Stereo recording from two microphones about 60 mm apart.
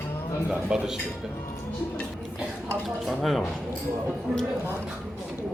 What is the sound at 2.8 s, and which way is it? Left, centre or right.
Speech, centre.